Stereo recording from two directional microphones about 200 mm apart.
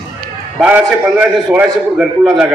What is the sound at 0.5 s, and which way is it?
A man's voice, 5° right (ahead or behind).